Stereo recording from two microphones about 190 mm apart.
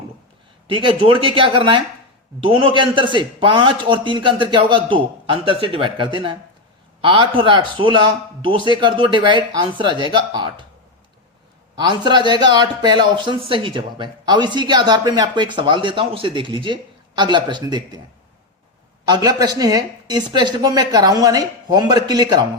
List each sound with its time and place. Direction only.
0.7 s speech: 25° right (ahead or behind)
11.8 s speech: 25° right (ahead or behind)
19.0 s speech: 20° right (ahead or behind)